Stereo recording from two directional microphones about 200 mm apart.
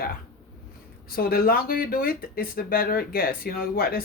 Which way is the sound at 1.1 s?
50° left (ahead or behind).